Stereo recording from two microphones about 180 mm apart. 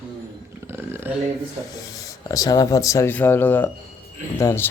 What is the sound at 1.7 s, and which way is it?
Speech, 20° left (ahead or behind).